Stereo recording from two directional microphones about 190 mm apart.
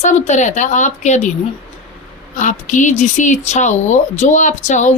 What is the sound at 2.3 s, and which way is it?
A woman's voice, 40° left (ahead or behind).